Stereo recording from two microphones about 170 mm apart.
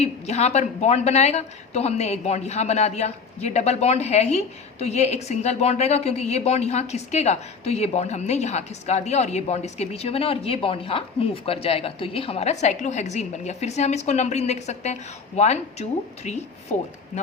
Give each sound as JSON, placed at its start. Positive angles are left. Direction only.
{"t": 0.0, "sound": "speech", "side_deg": 40}